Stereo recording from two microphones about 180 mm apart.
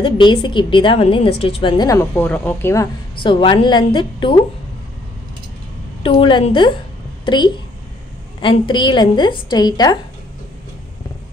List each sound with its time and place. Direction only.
0.0 s a woman's voice: 25° left (ahead or behind)
3.3 s a woman's voice: 25° left (ahead or behind)
6.0 s a woman's voice: 25° left (ahead or behind)